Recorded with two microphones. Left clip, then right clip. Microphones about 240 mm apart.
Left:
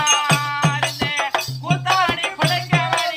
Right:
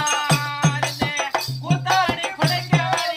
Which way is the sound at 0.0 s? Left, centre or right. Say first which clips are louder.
Left 4 dB; centre.